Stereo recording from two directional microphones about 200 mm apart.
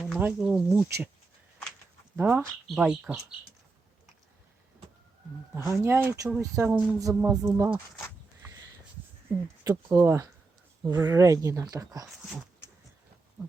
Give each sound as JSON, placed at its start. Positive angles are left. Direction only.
{"t": 0.0, "sound": "speech", "side_deg": -5}
{"t": 2.1, "sound": "speech", "side_deg": -10}
{"t": 5.8, "sound": "speech", "side_deg": -15}
{"t": 9.6, "sound": "speech", "side_deg": -15}